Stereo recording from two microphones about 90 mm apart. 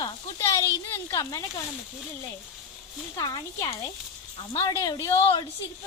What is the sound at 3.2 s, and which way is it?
Speech, 45° left (ahead or behind).